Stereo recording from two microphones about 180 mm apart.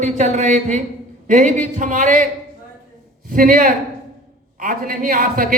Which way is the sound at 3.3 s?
50° right (ahead or behind).